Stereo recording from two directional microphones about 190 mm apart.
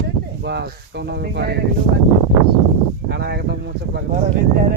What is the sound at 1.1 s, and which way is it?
Speech, 60° right (ahead or behind).